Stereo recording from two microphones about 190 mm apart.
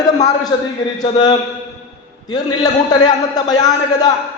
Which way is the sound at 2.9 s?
20° left (ahead or behind).